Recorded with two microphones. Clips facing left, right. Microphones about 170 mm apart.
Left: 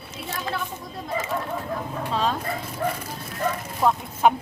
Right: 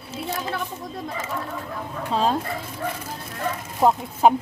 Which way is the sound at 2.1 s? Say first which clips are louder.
Right 3 dB; 35° right (ahead or behind).